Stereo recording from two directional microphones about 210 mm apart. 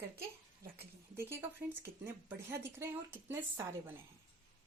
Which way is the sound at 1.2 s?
10° right (ahead or behind).